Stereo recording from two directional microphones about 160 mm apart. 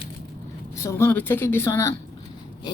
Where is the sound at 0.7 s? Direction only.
15° left (ahead or behind).